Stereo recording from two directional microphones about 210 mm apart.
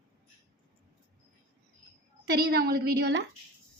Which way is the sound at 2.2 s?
50° right (ahead or behind).